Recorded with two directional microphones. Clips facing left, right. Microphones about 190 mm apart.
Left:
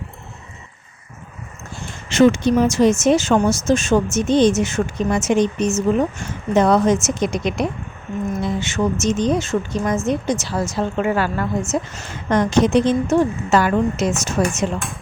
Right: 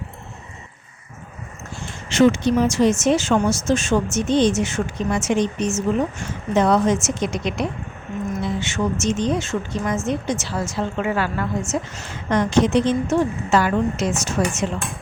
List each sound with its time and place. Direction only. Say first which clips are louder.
2.0 s a woman's voice: left 2 dB; 45° left (ahead or behind)